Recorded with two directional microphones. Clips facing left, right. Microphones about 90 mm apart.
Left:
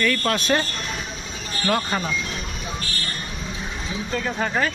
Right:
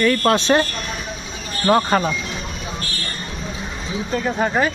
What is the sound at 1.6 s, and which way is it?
Speech, 35° right (ahead or behind).